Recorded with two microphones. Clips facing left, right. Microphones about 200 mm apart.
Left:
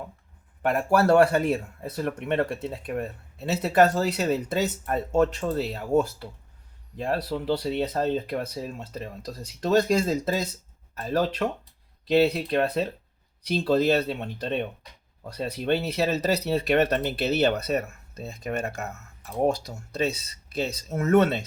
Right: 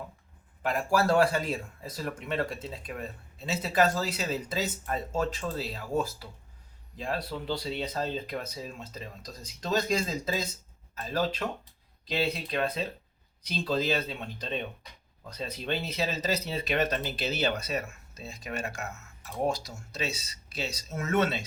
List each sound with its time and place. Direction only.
0.6 s speech: 60° left (ahead or behind)